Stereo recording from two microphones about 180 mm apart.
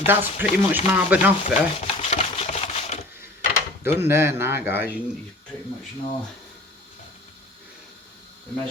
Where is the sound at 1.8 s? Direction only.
35° left (ahead or behind).